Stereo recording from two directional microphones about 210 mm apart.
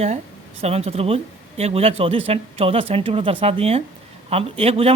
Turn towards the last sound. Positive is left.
turn(degrees=-25)  # may be behind; listen again after turning